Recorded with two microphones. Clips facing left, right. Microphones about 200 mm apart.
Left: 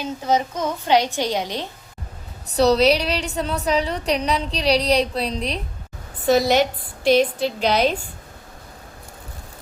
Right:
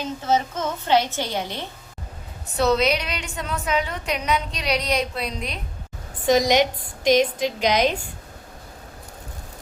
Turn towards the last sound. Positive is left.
turn(degrees=-15)  # may be behind; listen again after turning